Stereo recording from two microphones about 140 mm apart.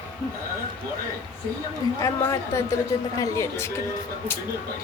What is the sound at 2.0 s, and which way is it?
A woman's voice, 20° left (ahead or behind).